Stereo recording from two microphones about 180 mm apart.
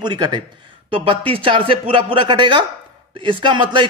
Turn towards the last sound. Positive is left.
turn(degrees=-25)  # may be behind; listen again after turning